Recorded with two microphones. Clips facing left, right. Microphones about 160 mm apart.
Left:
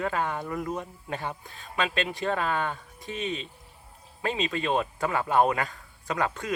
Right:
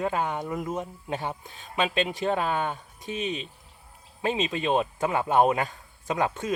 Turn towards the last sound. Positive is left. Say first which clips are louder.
# right 2 dB
turn(degrees=-20)  # may be behind; listen again after turning